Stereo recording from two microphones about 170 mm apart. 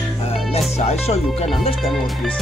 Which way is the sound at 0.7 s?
40° left (ahead or behind).